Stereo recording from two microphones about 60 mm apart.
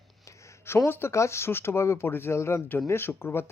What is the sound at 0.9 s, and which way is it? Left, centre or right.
Speech, left.